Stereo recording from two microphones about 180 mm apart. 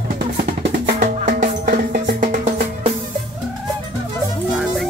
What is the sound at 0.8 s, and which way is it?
Music, 50° right (ahead or behind).